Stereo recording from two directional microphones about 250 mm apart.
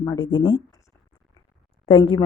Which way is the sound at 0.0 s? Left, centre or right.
Centre.